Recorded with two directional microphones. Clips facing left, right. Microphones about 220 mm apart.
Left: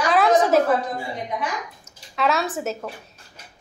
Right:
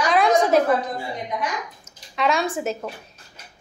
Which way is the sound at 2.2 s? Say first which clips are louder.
Even; 5° left (ahead or behind).